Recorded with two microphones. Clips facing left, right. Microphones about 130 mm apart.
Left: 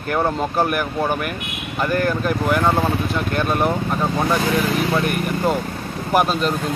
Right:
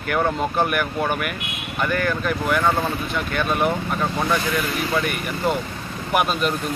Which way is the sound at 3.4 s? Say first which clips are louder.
Left 1 dB; centre (ahead or behind).